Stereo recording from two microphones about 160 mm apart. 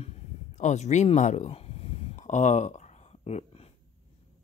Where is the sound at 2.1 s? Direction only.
50° left (ahead or behind).